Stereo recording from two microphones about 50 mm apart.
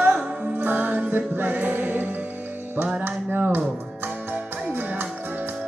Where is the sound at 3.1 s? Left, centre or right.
Right.